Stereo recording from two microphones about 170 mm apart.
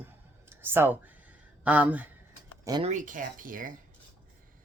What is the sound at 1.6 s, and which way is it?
Speech, 10° right (ahead or behind).